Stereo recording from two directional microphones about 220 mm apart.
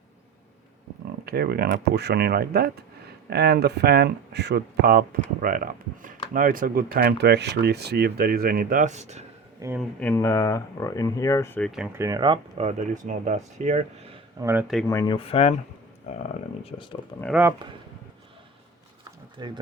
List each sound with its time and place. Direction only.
1.2 s speech: 45° right (ahead or behind)
9.6 s speech: 10° right (ahead or behind)
10.0 s speech: 10° left (ahead or behind)
11.7 s speech: 5° right (ahead or behind)
14.8 s speech: 15° left (ahead or behind)
16.6 s speech: 20° left (ahead or behind)
19.4 s speech: 20° right (ahead or behind)